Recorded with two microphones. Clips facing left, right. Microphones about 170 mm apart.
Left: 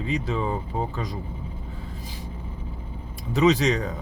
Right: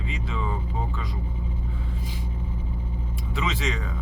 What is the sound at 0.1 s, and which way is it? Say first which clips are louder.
Speech: left 7 dB; 40° left (ahead or behind).